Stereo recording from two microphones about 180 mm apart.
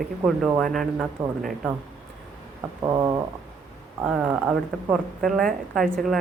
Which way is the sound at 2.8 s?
20° right (ahead or behind).